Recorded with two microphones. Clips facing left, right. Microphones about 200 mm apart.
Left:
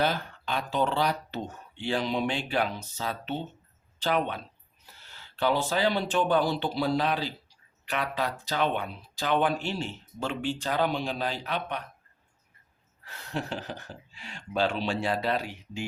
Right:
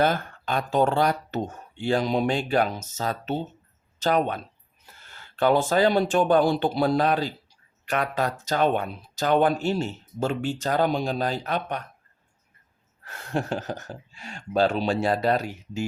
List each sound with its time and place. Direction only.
0.0 s speech: 50° right (ahead or behind)
13.1 s speech: 50° right (ahead or behind)